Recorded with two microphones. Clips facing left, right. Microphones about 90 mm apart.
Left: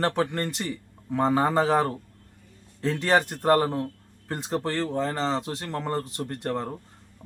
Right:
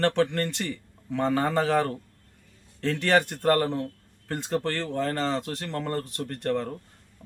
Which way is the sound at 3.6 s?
10° left (ahead or behind).